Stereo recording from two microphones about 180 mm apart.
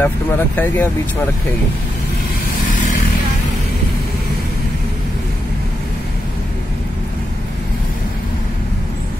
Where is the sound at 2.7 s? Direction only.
45° left (ahead or behind).